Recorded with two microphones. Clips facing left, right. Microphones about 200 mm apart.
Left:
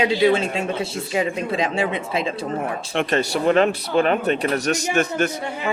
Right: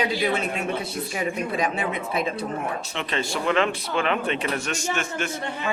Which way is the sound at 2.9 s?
50° left (ahead or behind).